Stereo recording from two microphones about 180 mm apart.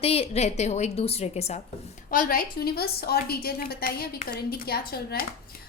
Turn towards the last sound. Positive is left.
turn(degrees=60)  # may be behind; listen again after turning